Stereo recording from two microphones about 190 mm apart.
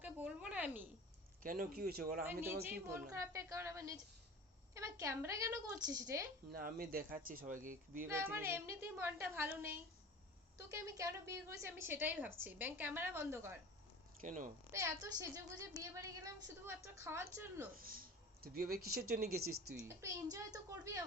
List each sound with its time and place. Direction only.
0.0 s a sound: 5° right (ahead or behind)
1.4 s speech: 45° right (ahead or behind)
2.2 s a woman's voice: 10° right (ahead or behind)
6.5 s speech: 50° right (ahead or behind)
8.0 s a woman's voice: 10° right (ahead or behind)
14.2 s speech: 45° right (ahead or behind)
14.7 s a woman's voice: 15° right (ahead or behind)
17.7 s speech: 50° right (ahead or behind)
19.3 s speech: 90° right
19.8 s a woman's voice: 15° right (ahead or behind)